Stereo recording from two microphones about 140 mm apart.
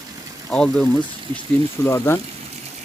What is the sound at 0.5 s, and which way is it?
Speech, 5° left (ahead or behind).